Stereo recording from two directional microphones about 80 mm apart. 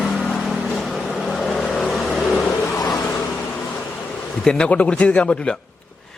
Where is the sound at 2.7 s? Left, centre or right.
Left.